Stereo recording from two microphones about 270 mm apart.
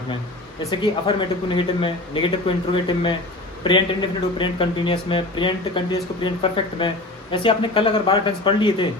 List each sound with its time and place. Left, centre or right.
0.7 s speech: centre